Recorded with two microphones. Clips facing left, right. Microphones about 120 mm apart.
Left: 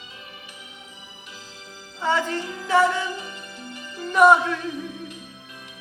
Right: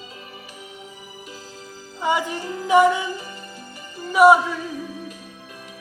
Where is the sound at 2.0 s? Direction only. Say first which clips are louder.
Right 1 dB; 15° right (ahead or behind).